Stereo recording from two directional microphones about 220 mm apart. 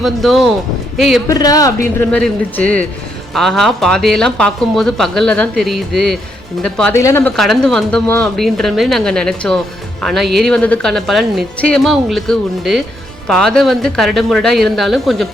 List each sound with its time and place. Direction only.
0.0 s speech: centre (ahead or behind)
1.3 s a man's voice: 15° left (ahead or behind)
2.0 s speech: 5° left (ahead or behind)